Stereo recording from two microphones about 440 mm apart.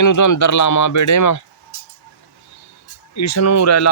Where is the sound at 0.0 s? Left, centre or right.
Left.